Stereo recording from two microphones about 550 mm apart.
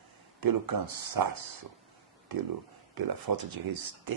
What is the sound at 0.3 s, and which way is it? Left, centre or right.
Speech, right.